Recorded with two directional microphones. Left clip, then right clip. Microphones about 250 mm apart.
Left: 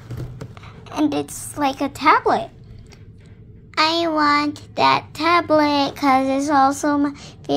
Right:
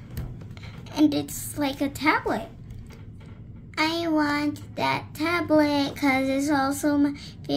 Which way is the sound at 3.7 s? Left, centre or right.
Centre.